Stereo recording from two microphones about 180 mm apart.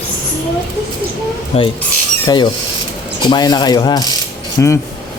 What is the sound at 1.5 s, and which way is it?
A man's voice, 35° left (ahead or behind).